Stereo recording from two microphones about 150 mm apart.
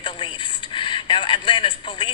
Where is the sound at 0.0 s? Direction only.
30° left (ahead or behind).